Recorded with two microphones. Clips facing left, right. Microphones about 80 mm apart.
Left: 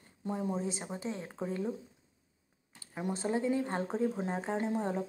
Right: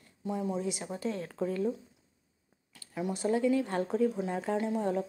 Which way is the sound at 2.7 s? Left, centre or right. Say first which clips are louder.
Right 2 dB; left.